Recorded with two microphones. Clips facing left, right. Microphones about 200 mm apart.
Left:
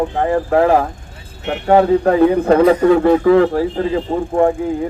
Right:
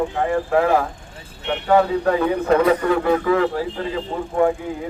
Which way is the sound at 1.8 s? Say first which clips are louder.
Left 8 dB; 30° left (ahead or behind).